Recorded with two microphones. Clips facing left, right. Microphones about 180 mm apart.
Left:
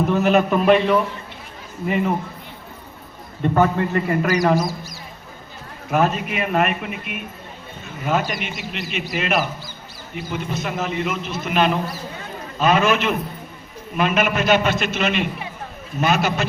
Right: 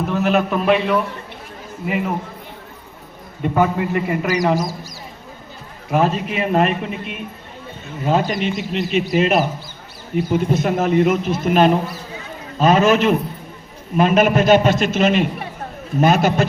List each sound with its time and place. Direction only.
0.1 s a man's voice: centre (ahead or behind)
3.4 s a man's voice: 10° right (ahead or behind)
5.9 s a man's voice: 30° right (ahead or behind)
10.2 s a man's voice: 50° right (ahead or behind)